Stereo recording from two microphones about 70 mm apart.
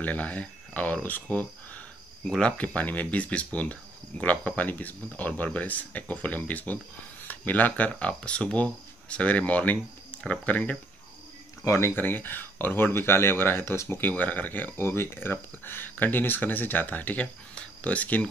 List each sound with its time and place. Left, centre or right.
0.0 s speech: left
11.6 s speech: left
11.9 s speech: left